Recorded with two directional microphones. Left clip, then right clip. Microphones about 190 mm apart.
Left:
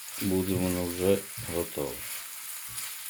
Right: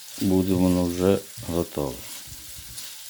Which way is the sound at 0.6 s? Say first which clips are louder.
Right 6 dB; 45° right (ahead or behind).